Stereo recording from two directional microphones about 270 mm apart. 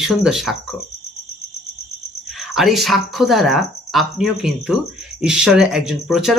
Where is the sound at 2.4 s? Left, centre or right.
Centre.